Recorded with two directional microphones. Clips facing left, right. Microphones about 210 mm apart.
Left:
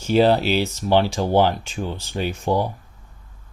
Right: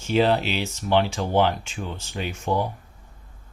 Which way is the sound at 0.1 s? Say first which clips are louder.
Left 4 dB; 35° left (ahead or behind).